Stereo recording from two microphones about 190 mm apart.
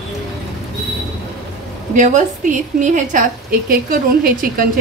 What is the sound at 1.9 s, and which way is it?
A woman's voice, 40° right (ahead or behind).